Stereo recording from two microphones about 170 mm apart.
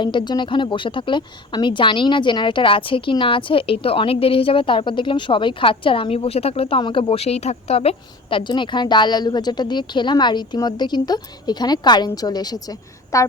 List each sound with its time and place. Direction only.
0.0 s speech: 25° left (ahead or behind)